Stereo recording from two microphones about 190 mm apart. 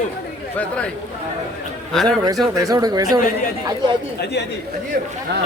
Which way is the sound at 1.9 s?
Centre (ahead or behind).